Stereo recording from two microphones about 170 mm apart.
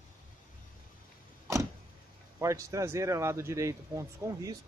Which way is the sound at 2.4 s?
20° right (ahead or behind).